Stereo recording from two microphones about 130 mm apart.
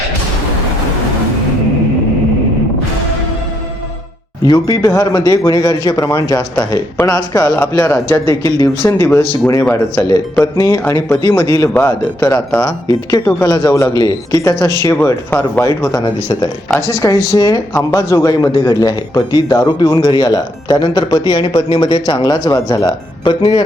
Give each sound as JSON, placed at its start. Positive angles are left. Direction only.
{"t": 4.4, "sound": "speech", "side_deg": 30}
{"t": 10.4, "sound": "speech", "side_deg": 25}
{"t": 15.0, "sound": "speech", "side_deg": 15}
{"t": 15.9, "sound": "speech", "side_deg": 35}